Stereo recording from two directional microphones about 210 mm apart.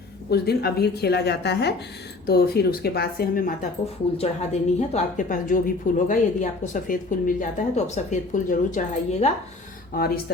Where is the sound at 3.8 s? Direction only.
30° left (ahead or behind).